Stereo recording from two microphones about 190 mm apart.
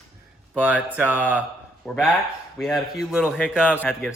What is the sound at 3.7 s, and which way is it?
Speech, 10° left (ahead or behind).